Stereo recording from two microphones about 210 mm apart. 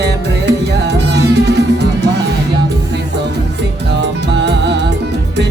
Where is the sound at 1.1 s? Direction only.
55° right (ahead or behind).